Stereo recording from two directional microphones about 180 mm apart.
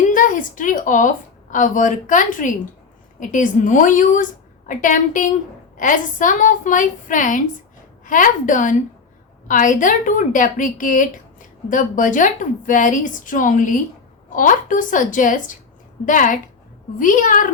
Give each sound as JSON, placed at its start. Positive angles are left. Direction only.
{"t": 0.1, "sound": "a woman's voice", "side_deg": 50}